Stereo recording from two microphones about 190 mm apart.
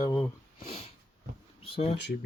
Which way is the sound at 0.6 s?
35° left (ahead or behind).